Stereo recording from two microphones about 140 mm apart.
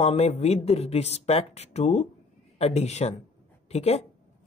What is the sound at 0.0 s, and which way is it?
A woman's voice, 50° left (ahead or behind).